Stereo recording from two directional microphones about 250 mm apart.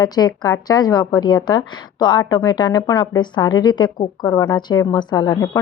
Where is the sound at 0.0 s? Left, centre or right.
Centre.